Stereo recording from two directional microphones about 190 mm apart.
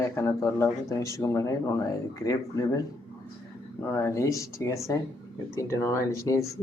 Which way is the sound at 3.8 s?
15° left (ahead or behind).